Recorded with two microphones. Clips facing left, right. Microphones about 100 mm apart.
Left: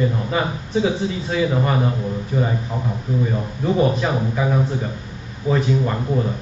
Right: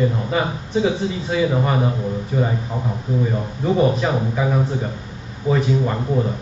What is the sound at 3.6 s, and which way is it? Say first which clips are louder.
Speech: right 1 dB; centre (ahead or behind).